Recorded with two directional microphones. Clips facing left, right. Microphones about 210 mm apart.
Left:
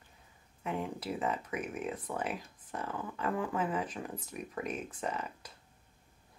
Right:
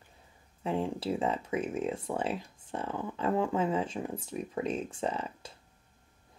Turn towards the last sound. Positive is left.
turn(degrees=-30)  # may be behind; listen again after turning